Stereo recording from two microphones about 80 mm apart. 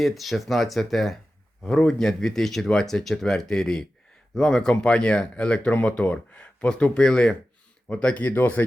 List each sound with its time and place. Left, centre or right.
0.0 s speech: centre; by 8.6 s left